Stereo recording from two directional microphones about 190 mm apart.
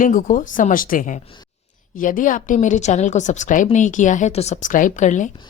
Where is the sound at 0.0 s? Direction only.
45° left (ahead or behind).